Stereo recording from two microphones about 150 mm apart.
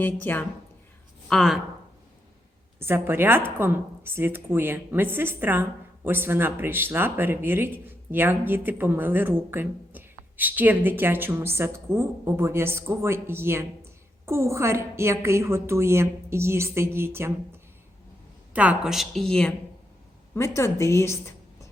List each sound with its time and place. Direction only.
0.0 s a woman's voice: 15° left (ahead or behind)
1.3 s a woman's voice: centre (ahead or behind)
2.7 s a woman's voice: 15° right (ahead or behind); by 19.5 s 5° left (ahead or behind)
20.3 s a woman's voice: 20° left (ahead or behind)